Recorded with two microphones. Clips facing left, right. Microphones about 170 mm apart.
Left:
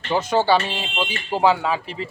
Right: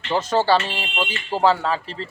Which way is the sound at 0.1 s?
Centre (ahead or behind).